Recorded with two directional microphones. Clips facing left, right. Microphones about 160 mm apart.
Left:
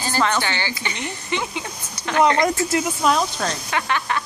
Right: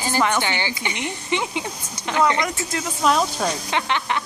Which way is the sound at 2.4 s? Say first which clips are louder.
Left 5 dB; 35° left (ahead or behind).